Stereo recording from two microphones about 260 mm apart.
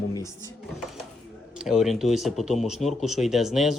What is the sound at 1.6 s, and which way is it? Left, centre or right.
Speech, centre.